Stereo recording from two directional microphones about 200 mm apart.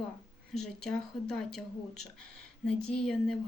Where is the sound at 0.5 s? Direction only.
5° left (ahead or behind).